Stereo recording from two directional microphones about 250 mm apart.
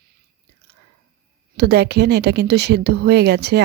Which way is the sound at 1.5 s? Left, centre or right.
Right.